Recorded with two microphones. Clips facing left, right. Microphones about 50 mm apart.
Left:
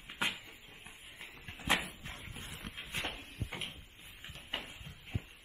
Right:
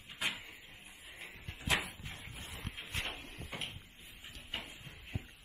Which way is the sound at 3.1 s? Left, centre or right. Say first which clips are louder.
Left 1 dB; right.